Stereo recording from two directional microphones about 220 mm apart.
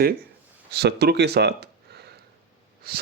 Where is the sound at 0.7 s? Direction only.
45° right (ahead or behind).